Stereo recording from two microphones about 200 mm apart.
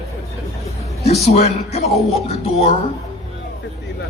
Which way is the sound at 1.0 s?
30° left (ahead or behind).